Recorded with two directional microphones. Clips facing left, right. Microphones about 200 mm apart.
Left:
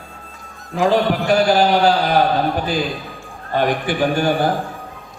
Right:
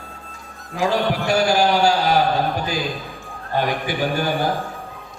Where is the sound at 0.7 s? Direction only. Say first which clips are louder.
Left 4 dB; 50° left (ahead or behind).